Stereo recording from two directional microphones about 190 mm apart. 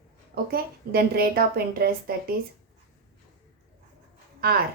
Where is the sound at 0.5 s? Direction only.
55° right (ahead or behind).